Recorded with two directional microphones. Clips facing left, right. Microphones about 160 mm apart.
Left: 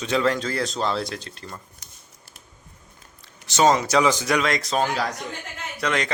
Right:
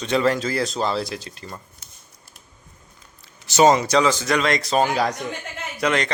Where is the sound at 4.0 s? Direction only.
15° left (ahead or behind); by 4.8 s centre (ahead or behind).